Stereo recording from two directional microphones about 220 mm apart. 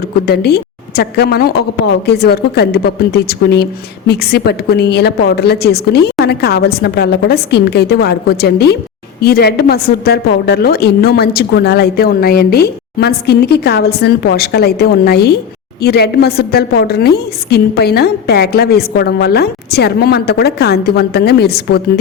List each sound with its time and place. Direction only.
0.0 s a woman's voice: 45° left (ahead or behind)